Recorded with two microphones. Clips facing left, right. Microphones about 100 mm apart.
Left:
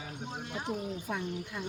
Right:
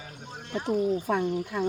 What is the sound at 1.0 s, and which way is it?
Speech, 55° right (ahead or behind).